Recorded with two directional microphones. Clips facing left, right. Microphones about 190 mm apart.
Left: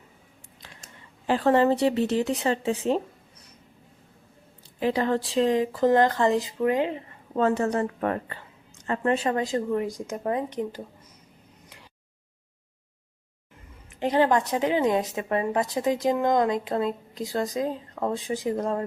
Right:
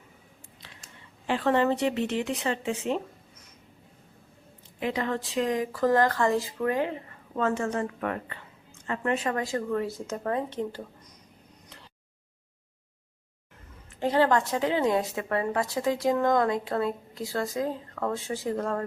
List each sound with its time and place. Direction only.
1.3 s speech: 35° left (ahead or behind)
4.8 s speech: 35° left (ahead or behind)
7.3 s a woman's voice: 35° left (ahead or behind); by 10.8 s 15° left (ahead or behind)
14.0 s a woman's voice: 15° left (ahead or behind)